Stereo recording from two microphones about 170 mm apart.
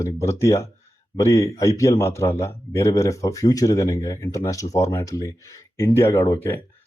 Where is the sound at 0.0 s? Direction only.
20° left (ahead or behind).